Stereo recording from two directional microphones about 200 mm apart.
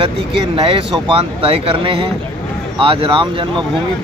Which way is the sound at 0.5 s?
25° right (ahead or behind).